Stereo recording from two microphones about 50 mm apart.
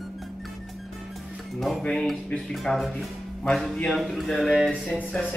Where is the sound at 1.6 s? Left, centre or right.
Centre.